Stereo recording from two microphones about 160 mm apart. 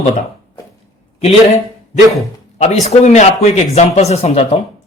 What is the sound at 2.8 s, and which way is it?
Speech, 45° left (ahead or behind).